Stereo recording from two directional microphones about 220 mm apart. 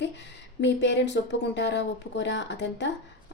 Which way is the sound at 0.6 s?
50° left (ahead or behind).